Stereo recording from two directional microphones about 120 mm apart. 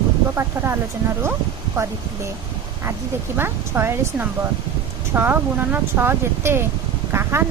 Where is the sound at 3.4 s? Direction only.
20° right (ahead or behind).